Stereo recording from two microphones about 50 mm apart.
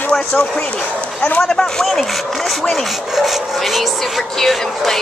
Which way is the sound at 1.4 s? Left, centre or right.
Centre.